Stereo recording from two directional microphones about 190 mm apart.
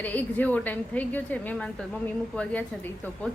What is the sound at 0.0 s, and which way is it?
A woman's voice, 10° left (ahead or behind).